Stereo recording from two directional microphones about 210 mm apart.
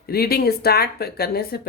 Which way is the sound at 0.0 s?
50° left (ahead or behind).